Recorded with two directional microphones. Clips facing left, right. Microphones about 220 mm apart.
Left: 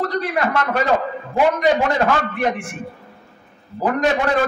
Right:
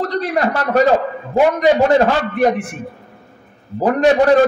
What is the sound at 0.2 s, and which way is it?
A man's voice, 40° right (ahead or behind).